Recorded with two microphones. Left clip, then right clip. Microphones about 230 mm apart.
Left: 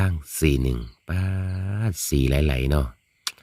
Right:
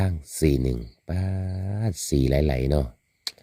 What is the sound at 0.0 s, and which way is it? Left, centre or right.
Speech, centre.